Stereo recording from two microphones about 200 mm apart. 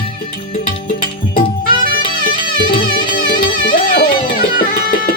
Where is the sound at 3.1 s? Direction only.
45° left (ahead or behind).